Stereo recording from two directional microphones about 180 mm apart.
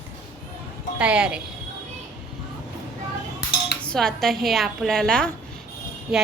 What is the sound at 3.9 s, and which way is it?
A woman's voice, centre (ahead or behind).